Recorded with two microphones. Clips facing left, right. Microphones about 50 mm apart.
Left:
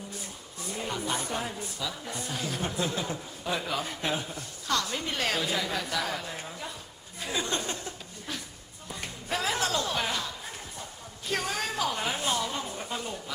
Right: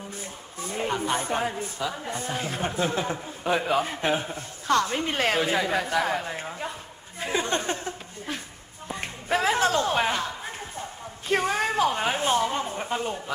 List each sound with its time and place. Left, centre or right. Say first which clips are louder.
0.6 s speech: right 6 dB; right
8.9 s a sound: right 7 dB; right
11.3 s speech: right 7 dB; right